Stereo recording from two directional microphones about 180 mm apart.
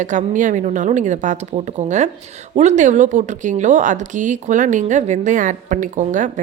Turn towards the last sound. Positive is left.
turn(degrees=-45)  # may be behind; listen again after turning